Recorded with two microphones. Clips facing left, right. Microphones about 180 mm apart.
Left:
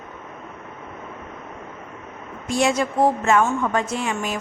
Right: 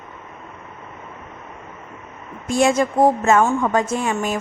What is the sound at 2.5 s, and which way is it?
Speech, 50° right (ahead or behind).